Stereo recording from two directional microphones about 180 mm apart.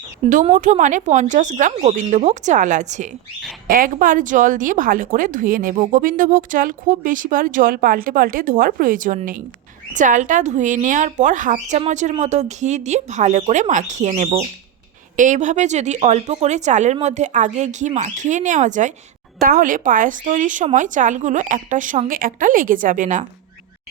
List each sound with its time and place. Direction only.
0.4 s a woman's voice: 45° right (ahead or behind)